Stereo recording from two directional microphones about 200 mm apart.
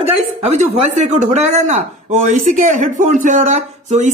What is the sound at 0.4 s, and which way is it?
Speech, 35° right (ahead or behind).